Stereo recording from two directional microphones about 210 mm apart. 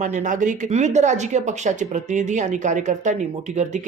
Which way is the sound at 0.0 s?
35° right (ahead or behind).